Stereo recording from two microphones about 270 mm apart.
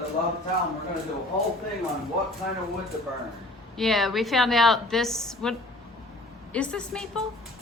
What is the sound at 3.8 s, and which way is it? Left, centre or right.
A woman's voice, centre.